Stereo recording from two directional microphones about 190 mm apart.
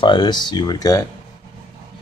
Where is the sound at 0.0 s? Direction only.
25° left (ahead or behind).